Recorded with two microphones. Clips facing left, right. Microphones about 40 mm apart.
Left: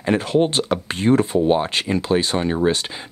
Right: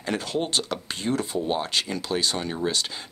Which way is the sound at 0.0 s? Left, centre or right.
Left.